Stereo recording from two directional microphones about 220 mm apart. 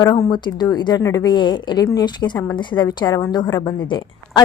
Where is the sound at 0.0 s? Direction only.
15° left (ahead or behind).